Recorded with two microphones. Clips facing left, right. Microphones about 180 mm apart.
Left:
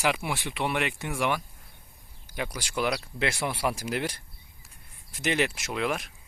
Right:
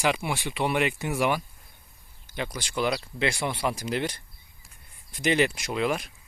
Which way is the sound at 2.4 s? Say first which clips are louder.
Right 1 dB; 10° left (ahead or behind).